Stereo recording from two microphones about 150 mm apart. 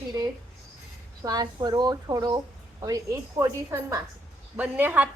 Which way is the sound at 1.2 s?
25° right (ahead or behind).